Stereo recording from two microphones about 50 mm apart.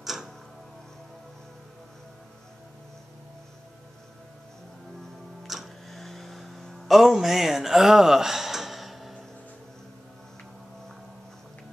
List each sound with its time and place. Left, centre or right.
0.0 s tick-tock: centre
5.5 s music: centre
5.9 s hum: centre